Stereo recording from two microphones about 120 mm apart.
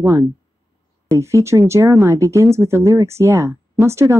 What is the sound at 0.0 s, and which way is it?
Speech, 25° right (ahead or behind).